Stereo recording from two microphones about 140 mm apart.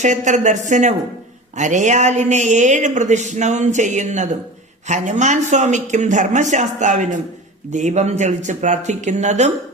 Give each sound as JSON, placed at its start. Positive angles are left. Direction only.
{"t": 0.0, "sound": "speech", "side_deg": -60}